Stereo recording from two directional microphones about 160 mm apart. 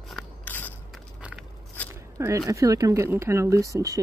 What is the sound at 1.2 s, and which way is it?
Biting, 5° right (ahead or behind).